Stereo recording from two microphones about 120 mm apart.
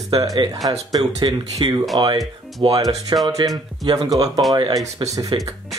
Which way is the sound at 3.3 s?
30° right (ahead or behind).